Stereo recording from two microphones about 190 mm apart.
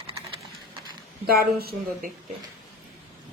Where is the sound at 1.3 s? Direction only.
50° right (ahead or behind).